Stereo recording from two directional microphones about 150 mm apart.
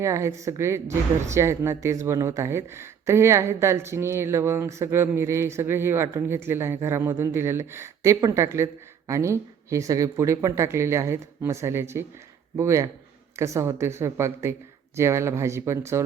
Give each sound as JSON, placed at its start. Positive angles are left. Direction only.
{"t": 0.0, "sound": "speech", "side_deg": -20}